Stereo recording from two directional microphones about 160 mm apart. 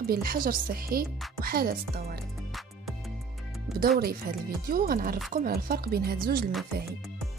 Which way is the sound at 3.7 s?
70° right (ahead or behind).